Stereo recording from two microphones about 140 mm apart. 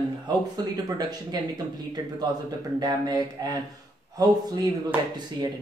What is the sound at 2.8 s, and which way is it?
Speech, 30° right (ahead or behind).